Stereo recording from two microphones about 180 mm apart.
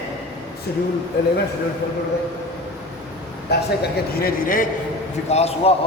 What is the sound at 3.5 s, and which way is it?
Speech, 65° left (ahead or behind).